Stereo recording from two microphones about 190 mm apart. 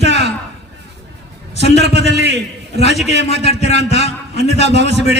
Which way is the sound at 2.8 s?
35° left (ahead or behind).